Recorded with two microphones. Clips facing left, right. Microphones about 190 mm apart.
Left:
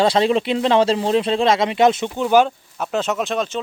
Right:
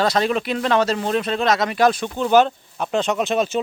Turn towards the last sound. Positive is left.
turn(degrees=-5)  # may be behind; listen again after turning